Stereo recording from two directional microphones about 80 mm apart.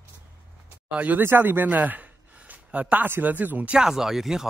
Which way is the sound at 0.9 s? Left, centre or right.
Right.